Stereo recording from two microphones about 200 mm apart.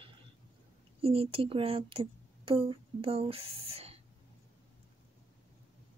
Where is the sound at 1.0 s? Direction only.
30° right (ahead or behind).